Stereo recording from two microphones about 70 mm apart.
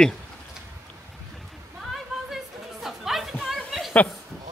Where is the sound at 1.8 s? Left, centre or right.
Centre.